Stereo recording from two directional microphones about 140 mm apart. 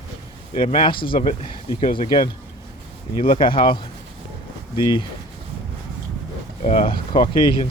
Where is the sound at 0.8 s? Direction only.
35° left (ahead or behind).